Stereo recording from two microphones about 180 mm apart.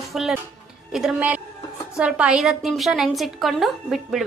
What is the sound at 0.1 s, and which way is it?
A woman's voice, centre (ahead or behind).